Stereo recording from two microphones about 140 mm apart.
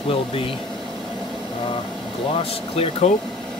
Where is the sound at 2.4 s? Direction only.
45° left (ahead or behind).